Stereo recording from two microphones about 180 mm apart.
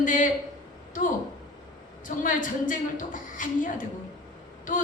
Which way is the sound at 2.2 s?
45° left (ahead or behind).